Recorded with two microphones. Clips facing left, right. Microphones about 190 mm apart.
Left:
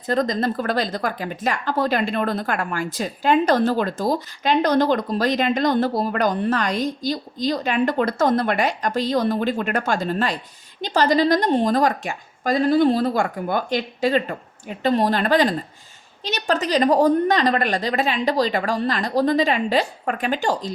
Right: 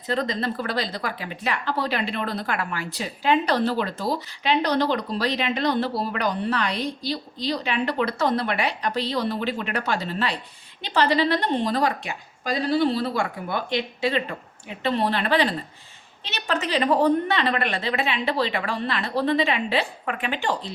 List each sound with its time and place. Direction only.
0.1 s a woman's voice: 45° left (ahead or behind)